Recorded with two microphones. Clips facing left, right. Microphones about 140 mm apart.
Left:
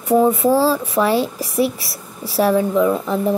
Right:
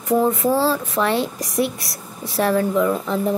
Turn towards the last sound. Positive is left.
turn(degrees=5)  # may be behind; listen again after turning